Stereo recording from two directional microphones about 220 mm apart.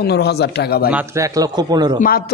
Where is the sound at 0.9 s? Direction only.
15° right (ahead or behind).